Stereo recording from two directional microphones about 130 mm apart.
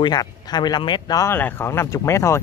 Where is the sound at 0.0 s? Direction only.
30° left (ahead or behind).